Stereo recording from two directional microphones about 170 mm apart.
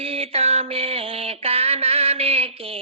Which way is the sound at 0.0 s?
35° right (ahead or behind).